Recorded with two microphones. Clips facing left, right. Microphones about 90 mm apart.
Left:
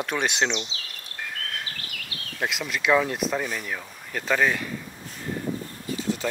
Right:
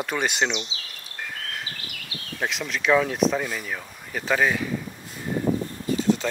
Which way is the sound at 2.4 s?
Centre (ahead or behind).